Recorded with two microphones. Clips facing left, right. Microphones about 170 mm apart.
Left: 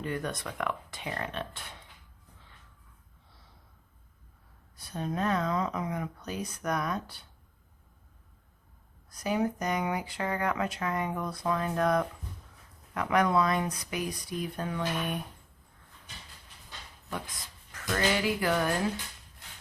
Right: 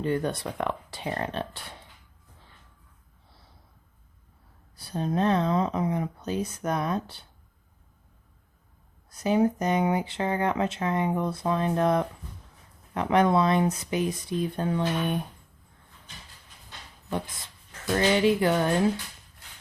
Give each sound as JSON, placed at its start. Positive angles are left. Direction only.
{"t": 0.0, "sound": "speech", "side_deg": -30}
{"t": 4.8, "sound": "speech", "side_deg": -30}
{"t": 9.0, "sound": "speech", "side_deg": -25}
{"t": 17.7, "sound": "speech", "side_deg": -25}